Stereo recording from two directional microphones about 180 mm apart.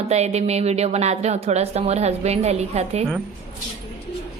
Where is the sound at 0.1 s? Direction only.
35° right (ahead or behind).